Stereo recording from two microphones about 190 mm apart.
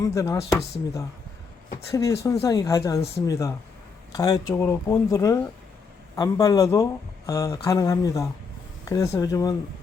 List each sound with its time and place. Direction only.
0.0 s speech: 15° left (ahead or behind)
1.9 s speech: 15° left (ahead or behind)